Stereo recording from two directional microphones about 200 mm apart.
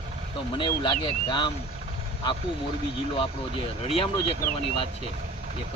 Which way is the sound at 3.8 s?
30° left (ahead or behind).